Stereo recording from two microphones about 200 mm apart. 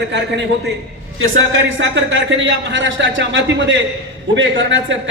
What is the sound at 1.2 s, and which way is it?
A man's voice, 70° right (ahead or behind).